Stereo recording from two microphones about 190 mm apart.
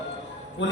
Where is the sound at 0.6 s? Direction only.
70° left (ahead or behind).